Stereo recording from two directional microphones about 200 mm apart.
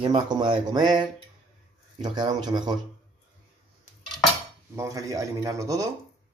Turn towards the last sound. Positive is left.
turn(degrees=-15)  # may be behind; listen again after turning